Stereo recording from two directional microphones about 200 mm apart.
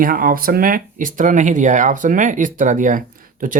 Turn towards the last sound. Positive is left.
turn(degrees=-40)  # may be behind; listen again after turning